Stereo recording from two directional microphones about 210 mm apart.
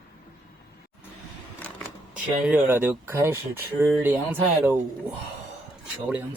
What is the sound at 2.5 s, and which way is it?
Speech, 10° right (ahead or behind).